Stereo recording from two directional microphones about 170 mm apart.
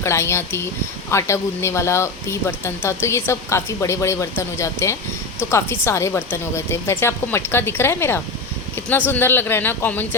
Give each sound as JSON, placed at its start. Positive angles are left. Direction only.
{"t": 0.0, "sound": "speech", "side_deg": 15}